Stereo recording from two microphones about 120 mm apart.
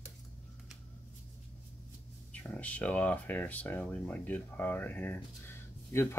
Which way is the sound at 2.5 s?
10° left (ahead or behind).